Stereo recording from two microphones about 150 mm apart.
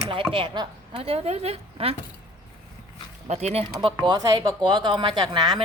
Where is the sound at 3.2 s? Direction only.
45° right (ahead or behind).